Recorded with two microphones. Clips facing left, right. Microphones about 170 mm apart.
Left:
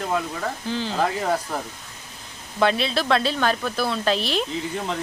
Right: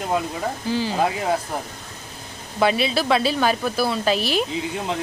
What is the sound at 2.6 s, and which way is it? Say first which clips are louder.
A woman's voice: right 1 dB; 5° right (ahead or behind).